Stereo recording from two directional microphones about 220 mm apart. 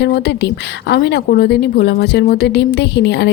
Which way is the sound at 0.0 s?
50° left (ahead or behind).